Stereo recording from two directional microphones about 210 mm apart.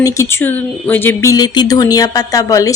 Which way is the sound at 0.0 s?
15° left (ahead or behind).